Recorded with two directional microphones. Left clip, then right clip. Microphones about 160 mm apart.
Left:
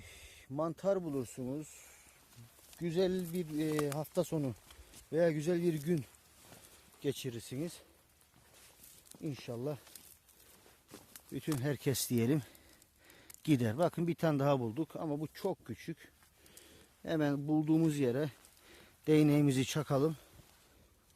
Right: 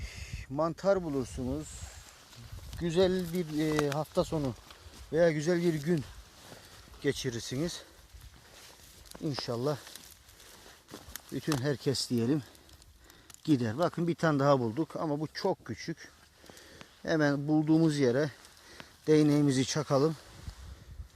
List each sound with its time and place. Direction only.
0.0 s speech: 20° left (ahead or behind)
2.8 s speech: 25° left (ahead or behind)
3.7 s speech: 30° right (ahead or behind)
3.9 s speech: 35° left (ahead or behind)
7.0 s speech: 25° left (ahead or behind)
7.3 s speech: 5° left (ahead or behind)
9.2 s speech: 5° left (ahead or behind)
11.6 s speech: 45° left (ahead or behind)
13.4 s speech: 50° left (ahead or behind); by 18.3 s 30° left (ahead or behind)
19.1 s speech: 50° left (ahead or behind)
19.8 s speech: 40° left (ahead or behind)